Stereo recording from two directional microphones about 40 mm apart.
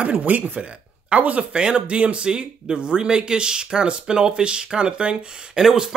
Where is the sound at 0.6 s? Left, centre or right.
Right.